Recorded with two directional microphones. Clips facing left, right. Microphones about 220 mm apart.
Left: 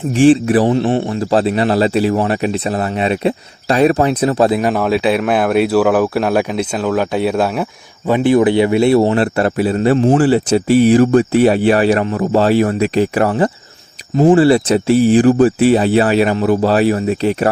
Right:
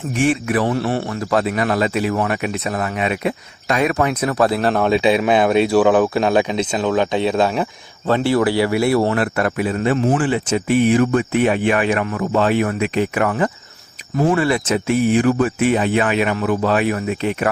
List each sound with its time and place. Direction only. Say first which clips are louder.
0.1 s a man's voice: left 8 dB; 30° left (ahead or behind)
4.6 s speech: left 1 dB; 5° left (ahead or behind)
8.1 s a man's voice: left 5 dB; 20° left (ahead or behind); by 17.5 s 35° left (ahead or behind)